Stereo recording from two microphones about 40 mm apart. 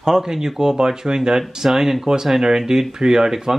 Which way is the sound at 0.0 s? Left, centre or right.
Centre.